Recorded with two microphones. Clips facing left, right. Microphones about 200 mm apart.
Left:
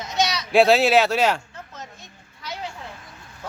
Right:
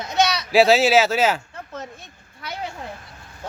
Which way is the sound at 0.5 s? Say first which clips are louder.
Even; centre (ahead or behind).